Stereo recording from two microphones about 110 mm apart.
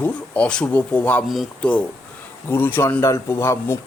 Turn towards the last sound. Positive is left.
turn(degrees=25)  # may be behind; listen again after turning